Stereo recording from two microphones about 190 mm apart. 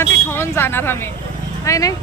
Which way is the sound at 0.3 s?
10° left (ahead or behind).